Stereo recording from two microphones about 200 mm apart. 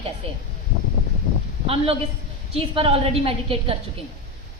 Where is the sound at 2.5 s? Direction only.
30° right (ahead or behind).